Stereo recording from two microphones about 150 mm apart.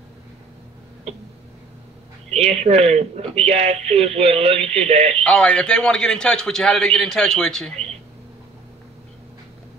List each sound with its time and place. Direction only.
2.2 s a man's voice: 45° right (ahead or behind)
5.2 s a man's voice: 5° left (ahead or behind)